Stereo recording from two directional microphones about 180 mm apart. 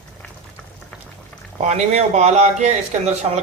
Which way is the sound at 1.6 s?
40° right (ahead or behind).